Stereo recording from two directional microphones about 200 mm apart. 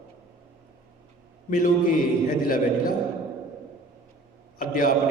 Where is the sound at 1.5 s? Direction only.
40° left (ahead or behind).